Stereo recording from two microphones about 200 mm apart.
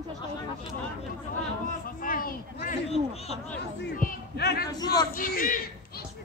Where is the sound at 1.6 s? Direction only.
45° left (ahead or behind).